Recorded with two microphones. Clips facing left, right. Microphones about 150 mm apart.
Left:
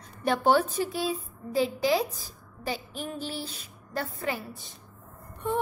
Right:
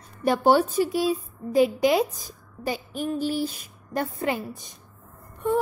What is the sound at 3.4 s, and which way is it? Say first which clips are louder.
A woman's voice: right 10 dB; 15° right (ahead or behind).